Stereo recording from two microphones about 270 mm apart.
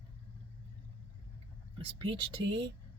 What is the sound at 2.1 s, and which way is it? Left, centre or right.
Speech, centre.